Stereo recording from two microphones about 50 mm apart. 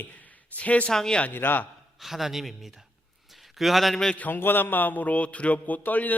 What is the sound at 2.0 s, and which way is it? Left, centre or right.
Speech, centre.